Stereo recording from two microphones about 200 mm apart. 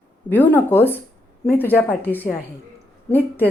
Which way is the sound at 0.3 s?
10° left (ahead or behind).